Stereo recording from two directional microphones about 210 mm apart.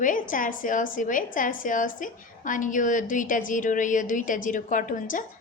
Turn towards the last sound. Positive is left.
turn(degrees=40)  # may be behind; listen again after turning